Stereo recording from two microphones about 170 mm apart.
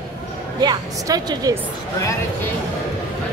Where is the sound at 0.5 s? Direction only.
25° right (ahead or behind).